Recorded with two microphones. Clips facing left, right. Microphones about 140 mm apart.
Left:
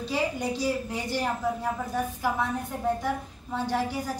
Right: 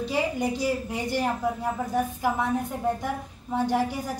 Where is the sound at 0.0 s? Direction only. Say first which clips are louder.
Right 2 dB; 15° right (ahead or behind).